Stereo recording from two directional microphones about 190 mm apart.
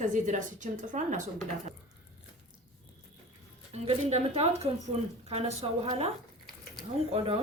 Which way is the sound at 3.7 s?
35° right (ahead or behind).